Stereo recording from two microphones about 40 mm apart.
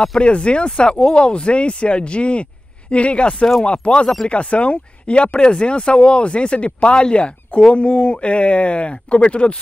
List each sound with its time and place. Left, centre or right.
0.2 s speech: left